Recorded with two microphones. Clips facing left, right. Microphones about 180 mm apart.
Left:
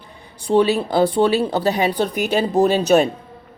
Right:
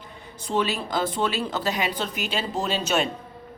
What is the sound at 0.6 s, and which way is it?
Speech, 35° left (ahead or behind).